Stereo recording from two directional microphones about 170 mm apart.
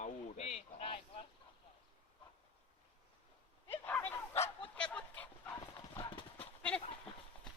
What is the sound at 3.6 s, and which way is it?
Dog, 10° left (ahead or behind).